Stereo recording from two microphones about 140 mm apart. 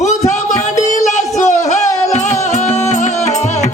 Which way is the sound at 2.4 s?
55° left (ahead or behind).